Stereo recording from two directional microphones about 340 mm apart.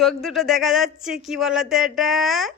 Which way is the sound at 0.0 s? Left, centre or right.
Centre.